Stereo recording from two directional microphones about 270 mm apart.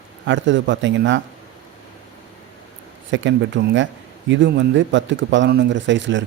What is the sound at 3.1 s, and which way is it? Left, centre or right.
A man's voice, right.